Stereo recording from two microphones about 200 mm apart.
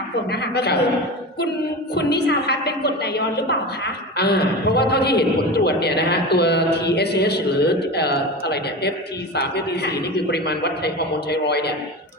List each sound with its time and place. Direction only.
0.3 s a man's voice: 55° left (ahead or behind)
2.0 s a man's voice: 55° left (ahead or behind)